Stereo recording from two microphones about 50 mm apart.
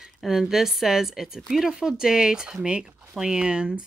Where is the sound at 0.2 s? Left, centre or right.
Centre.